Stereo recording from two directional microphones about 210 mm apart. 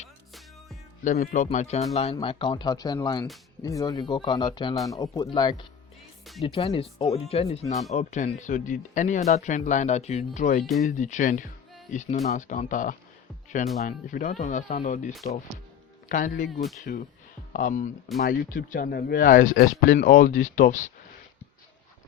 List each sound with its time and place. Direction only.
1.0 s speech: 40° left (ahead or behind)
10.6 s speech: centre (ahead or behind)
10.8 s speech: 35° left (ahead or behind)
16.6 s speech: centre (ahead or behind)
16.8 s speech: 40° left (ahead or behind)